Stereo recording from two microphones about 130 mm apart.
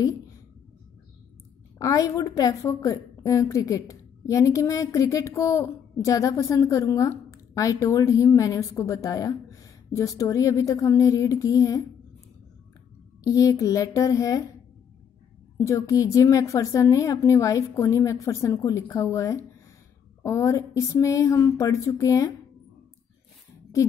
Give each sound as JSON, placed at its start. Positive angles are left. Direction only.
{"t": 1.8, "sound": "a woman's voice", "side_deg": 25}
{"t": 13.2, "sound": "a woman's voice", "side_deg": 25}
{"t": 15.5, "sound": "a woman's voice", "side_deg": 25}